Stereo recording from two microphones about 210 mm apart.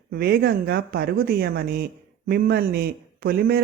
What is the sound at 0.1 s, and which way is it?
Speech, 50° right (ahead or behind).